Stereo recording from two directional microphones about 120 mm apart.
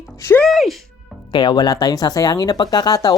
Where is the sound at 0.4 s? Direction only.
Centre (ahead or behind).